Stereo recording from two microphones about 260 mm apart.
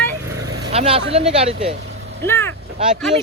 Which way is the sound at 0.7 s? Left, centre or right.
Right.